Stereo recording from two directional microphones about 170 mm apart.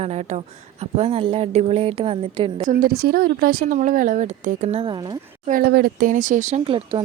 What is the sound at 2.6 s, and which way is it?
Speech, 60° right (ahead or behind).